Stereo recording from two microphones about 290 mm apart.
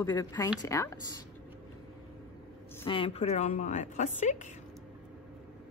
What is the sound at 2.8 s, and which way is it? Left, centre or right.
Speech, centre.